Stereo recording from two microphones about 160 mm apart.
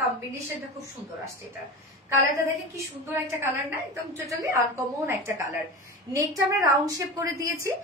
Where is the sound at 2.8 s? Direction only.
15° right (ahead or behind).